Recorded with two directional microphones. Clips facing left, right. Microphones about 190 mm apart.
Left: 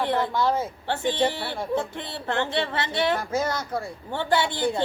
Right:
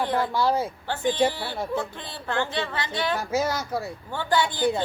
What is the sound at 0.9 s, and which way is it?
A woman's voice, 25° left (ahead or behind).